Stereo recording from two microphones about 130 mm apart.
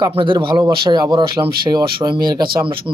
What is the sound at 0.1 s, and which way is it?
Speech, 40° right (ahead or behind).